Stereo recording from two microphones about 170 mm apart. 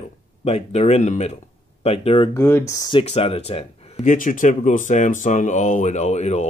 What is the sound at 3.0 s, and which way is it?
Speech, 40° left (ahead or behind).